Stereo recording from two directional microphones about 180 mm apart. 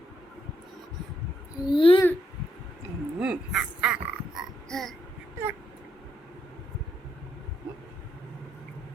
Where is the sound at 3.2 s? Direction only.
5° right (ahead or behind).